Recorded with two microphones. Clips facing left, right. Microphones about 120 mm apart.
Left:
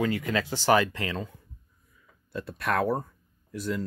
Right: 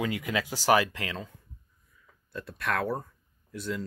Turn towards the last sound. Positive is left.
turn(degrees=0)  # may be behind; listen again after turning